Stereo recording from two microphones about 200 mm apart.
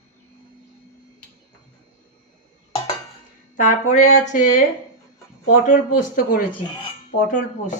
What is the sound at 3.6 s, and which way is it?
Speech, 40° left (ahead or behind).